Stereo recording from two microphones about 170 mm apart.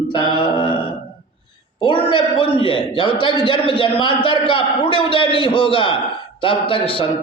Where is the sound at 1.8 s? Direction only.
30° left (ahead or behind).